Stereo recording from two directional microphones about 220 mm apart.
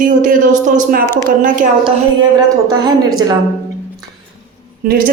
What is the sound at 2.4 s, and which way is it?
Speech, 15° right (ahead or behind).